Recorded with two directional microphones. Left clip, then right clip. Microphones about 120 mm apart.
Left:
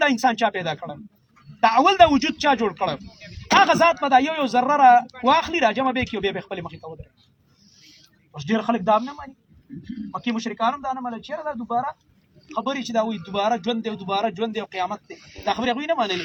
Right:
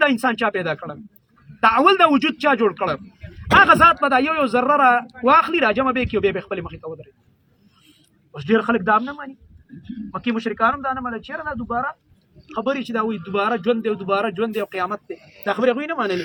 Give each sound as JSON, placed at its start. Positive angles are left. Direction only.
{"t": 0.0, "sound": "a man's voice", "side_deg": 20}
{"t": 8.4, "sound": "a man's voice", "side_deg": 20}
{"t": 10.1, "sound": "a man's voice", "side_deg": 20}
{"t": 15.2, "sound": "speech", "side_deg": 70}
{"t": 15.5, "sound": "a man's voice", "side_deg": 15}